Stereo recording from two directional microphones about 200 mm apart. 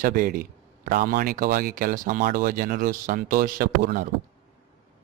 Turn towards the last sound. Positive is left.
turn(degrees=-45)  # may be behind; listen again after turning